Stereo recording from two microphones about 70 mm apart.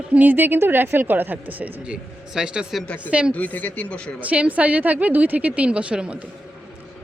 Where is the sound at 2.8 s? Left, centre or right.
Left.